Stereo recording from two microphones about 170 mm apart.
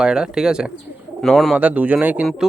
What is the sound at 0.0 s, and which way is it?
Speech, 5° right (ahead or behind).